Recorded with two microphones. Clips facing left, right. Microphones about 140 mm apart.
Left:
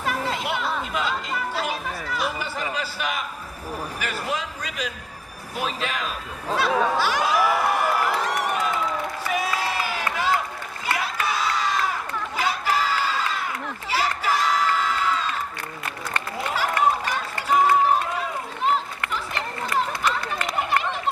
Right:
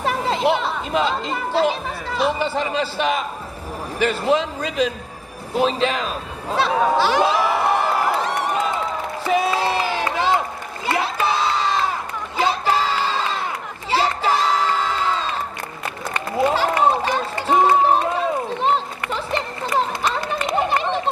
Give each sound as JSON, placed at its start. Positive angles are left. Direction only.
{"t": 0.0, "sound": "a man's voice", "side_deg": -25}
{"t": 5.5, "sound": "a sound", "side_deg": -25}
{"t": 9.2, "sound": "crowd", "side_deg": -25}
{"t": 16.4, "sound": "run", "side_deg": -25}